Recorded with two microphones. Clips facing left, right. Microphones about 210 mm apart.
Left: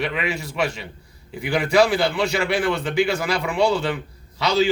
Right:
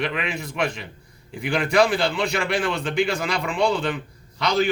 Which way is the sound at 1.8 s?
60° left (ahead or behind).